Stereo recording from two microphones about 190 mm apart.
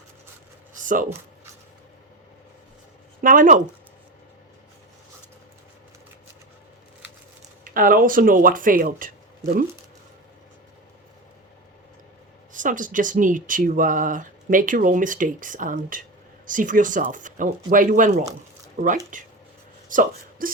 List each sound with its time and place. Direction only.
0.8 s a sound: 45° right (ahead or behind)
3.2 s speech: 45° right (ahead or behind)
7.6 s speech: 45° right (ahead or behind)
12.5 s speech: 45° right (ahead or behind)